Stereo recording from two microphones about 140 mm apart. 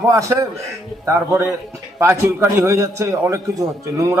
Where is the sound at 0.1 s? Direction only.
20° right (ahead or behind).